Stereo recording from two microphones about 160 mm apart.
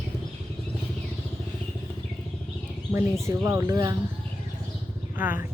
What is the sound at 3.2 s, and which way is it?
Speech, 20° right (ahead or behind).